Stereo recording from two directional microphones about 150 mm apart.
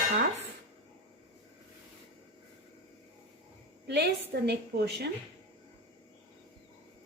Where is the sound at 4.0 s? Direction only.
90° right.